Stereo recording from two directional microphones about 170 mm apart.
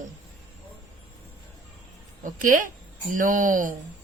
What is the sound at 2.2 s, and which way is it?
Speech, 50° right (ahead or behind).